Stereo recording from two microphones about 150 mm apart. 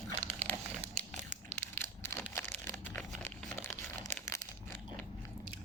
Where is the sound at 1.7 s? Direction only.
15° left (ahead or behind).